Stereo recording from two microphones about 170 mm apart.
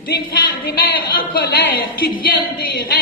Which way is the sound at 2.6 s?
65° left (ahead or behind).